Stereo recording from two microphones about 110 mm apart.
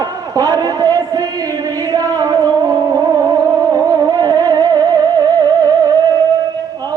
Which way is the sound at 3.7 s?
35° right (ahead or behind).